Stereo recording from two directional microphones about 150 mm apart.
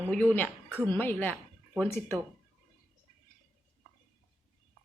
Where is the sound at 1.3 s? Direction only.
5° left (ahead or behind).